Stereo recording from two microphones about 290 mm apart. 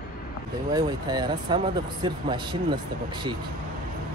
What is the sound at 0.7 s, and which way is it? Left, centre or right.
Speech, centre.